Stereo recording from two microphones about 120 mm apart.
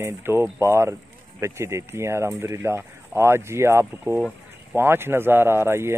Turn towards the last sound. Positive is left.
turn(degrees=-20)  # may be behind; listen again after turning